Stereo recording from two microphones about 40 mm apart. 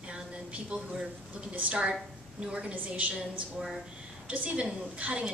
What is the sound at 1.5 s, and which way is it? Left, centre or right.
Speech, right.